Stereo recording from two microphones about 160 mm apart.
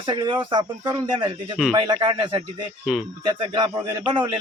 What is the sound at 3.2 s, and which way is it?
Speech, 30° right (ahead or behind).